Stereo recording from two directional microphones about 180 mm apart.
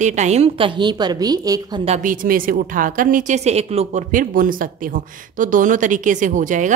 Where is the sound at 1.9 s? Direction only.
45° right (ahead or behind).